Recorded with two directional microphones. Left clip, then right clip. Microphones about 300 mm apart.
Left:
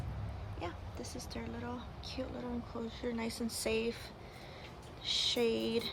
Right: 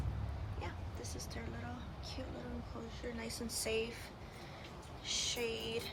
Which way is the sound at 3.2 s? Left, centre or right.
Centre.